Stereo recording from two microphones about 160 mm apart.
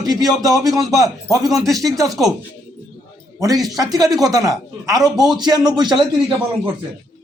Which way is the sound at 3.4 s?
25° right (ahead or behind).